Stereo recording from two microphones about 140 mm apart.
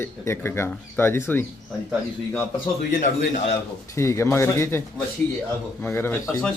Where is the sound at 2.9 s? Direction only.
65° left (ahead or behind).